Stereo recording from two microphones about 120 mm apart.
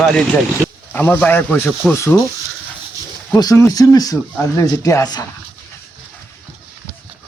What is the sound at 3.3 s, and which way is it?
Speech, 30° left (ahead or behind).